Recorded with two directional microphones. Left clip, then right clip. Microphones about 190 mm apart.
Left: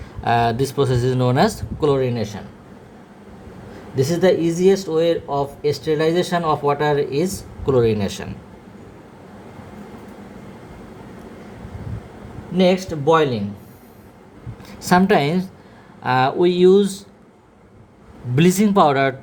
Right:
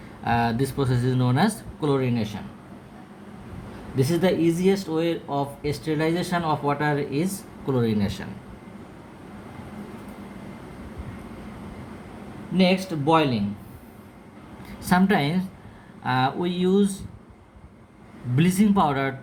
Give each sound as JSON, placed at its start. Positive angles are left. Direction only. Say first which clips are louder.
{"t": 0.3, "sound": "speech", "louder": "left 6 dB", "side_deg": 40}
{"t": 4.0, "sound": "speech", "louder": "left 5 dB", "side_deg": 35}
{"t": 12.5, "sound": "speech", "louder": "left 5 dB", "side_deg": 35}
{"t": 14.8, "sound": "speech", "louder": "left 6 dB", "side_deg": 45}
{"t": 18.3, "sound": "speech", "louder": "left 7 dB", "side_deg": 45}